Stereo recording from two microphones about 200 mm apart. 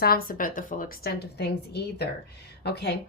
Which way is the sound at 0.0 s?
45° left (ahead or behind).